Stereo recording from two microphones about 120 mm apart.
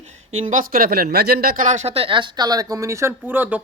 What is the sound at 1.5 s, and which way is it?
Speech, 85° right.